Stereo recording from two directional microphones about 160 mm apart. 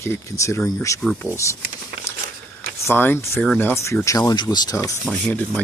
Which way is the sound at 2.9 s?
15° left (ahead or behind).